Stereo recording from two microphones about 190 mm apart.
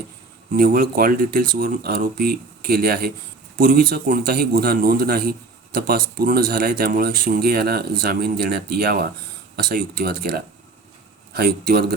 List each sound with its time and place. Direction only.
0.5 s a man's voice: 50° right (ahead or behind)